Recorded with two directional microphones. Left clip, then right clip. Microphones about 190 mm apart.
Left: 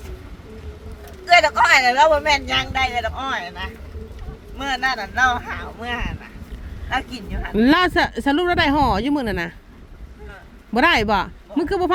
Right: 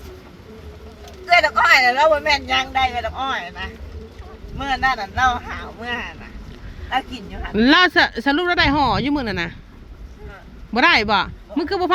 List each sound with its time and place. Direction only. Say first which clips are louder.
1.3 s speech: even; 15° right (ahead or behind)
7.5 s speech: right 2 dB; 10° left (ahead or behind)
10.8 s speech: right 1 dB; 15° left (ahead or behind)